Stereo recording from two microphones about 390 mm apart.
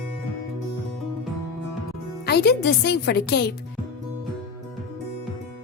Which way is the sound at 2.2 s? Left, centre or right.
Left.